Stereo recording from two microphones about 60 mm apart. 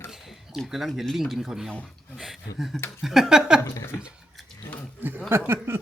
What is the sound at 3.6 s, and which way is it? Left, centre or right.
Speech, left.